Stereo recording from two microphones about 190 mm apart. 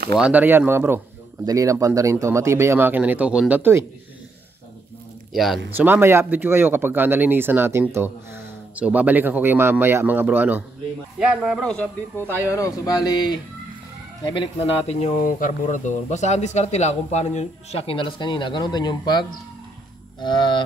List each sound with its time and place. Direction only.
0.2 s speech: 10° right (ahead or behind)
5.3 s speech: centre (ahead or behind)
5.8 s speech: 10° right (ahead or behind); by 11.9 s 5° left (ahead or behind)
12.4 s speech: 15° left (ahead or behind)